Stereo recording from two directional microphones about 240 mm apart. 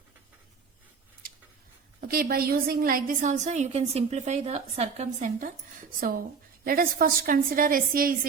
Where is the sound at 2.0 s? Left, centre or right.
Right.